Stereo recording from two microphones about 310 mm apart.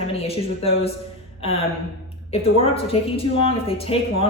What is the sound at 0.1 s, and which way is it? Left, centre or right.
Speech, centre.